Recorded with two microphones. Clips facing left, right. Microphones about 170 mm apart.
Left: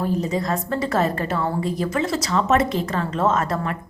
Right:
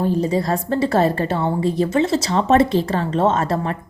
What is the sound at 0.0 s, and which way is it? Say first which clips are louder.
A woman's voice: right 4 dB; 30° right (ahead or behind).